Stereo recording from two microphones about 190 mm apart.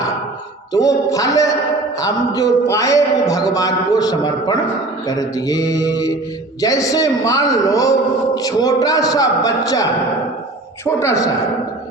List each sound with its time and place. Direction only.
0.7 s a man's voice: 20° left (ahead or behind)